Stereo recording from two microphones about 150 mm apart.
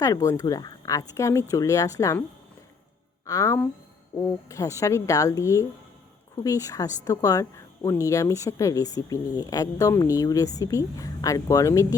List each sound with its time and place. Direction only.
0.0 s a woman's voice: 20° left (ahead or behind)
3.2 s a woman's voice: 20° left (ahead or behind)